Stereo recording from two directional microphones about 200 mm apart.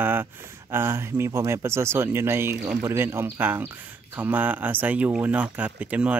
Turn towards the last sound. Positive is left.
turn(degrees=-5)  # may be behind; listen again after turning